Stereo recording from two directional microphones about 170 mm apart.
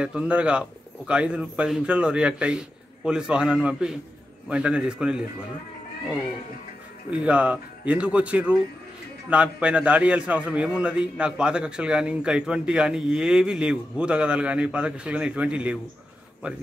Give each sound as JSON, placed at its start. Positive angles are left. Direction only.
{"t": 0.0, "sound": "a man's voice", "side_deg": -5}
{"t": 7.1, "sound": "a man's voice", "side_deg": -5}